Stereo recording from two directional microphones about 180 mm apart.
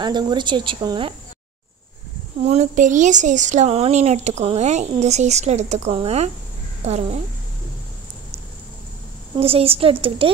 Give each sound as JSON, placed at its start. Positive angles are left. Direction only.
{"t": 0.0, "sound": "speech", "side_deg": -25}
{"t": 2.4, "sound": "a woman's voice", "side_deg": -40}
{"t": 9.4, "sound": "speech", "side_deg": -30}